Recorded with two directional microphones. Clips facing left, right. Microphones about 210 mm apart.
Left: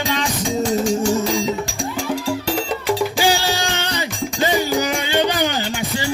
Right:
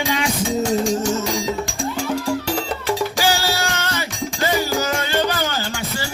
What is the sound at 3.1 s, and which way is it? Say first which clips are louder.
Music: left 2 dB; 15° left (ahead or behind).